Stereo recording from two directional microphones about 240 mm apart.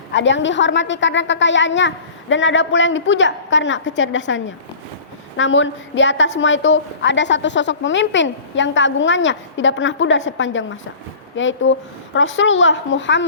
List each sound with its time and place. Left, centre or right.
0.1 s a woman's voice: left